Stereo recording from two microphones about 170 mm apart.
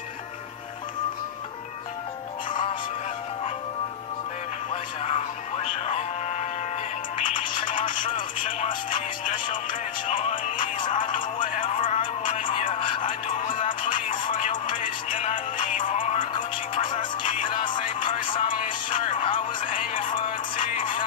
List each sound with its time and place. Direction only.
5.0 s music: 35° left (ahead or behind)
7.2 s music: 50° left (ahead or behind)
11.7 s music: 30° left (ahead or behind)
13.0 s music: 50° left (ahead or behind)
17.5 s music: 30° left (ahead or behind)
18.5 s music: 50° left (ahead or behind)
18.9 s music: 30° left (ahead or behind)
20.2 s music: 50° left (ahead or behind)